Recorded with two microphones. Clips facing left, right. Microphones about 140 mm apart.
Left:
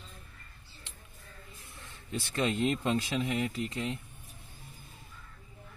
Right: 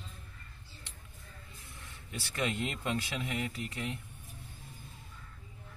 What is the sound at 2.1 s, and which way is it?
Speech, 30° left (ahead or behind).